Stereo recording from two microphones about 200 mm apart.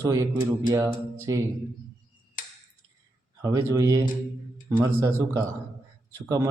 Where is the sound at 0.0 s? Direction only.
15° right (ahead or behind).